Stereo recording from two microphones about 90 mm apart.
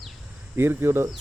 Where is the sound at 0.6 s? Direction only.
30° right (ahead or behind).